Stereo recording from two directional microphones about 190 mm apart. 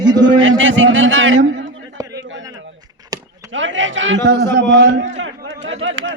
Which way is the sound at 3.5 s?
80° right.